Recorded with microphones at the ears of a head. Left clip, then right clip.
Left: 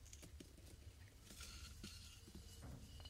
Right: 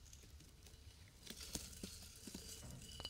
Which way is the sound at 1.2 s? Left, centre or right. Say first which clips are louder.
Right 7 dB; right.